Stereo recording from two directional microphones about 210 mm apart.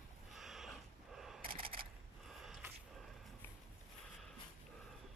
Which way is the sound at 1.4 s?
25° right (ahead or behind).